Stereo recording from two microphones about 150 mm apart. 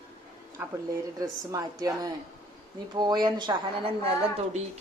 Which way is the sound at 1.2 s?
25° right (ahead or behind).